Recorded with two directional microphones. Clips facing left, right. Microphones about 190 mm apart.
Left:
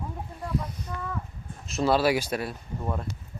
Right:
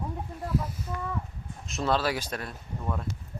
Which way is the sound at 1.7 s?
5° left (ahead or behind).